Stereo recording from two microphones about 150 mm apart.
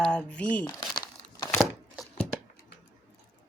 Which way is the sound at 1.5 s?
Centre (ahead or behind).